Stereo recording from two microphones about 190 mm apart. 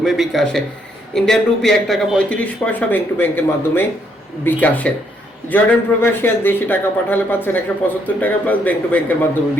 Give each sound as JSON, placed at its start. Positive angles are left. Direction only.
{"t": 0.0, "sound": "speech", "side_deg": 0}